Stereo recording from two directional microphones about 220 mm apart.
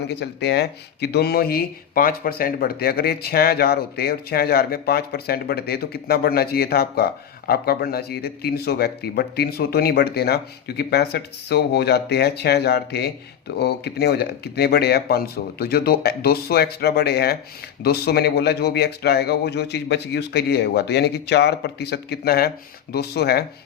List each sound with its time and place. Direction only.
0.1 s speech: 50° left (ahead or behind)